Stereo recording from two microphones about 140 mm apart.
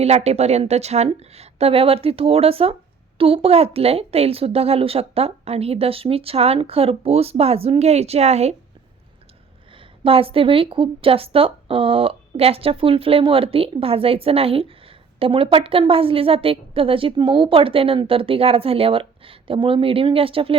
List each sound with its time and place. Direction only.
0.0 s speech: 50° right (ahead or behind)
10.0 s a woman's voice: 40° right (ahead or behind)